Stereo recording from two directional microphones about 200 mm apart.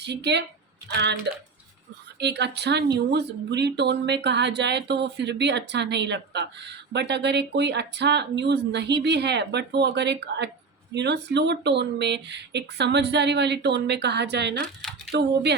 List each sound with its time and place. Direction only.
0.0 s speech: 55° right (ahead or behind)
2.1 s speech: 60° right (ahead or behind)
14.8 s a sound: centre (ahead or behind)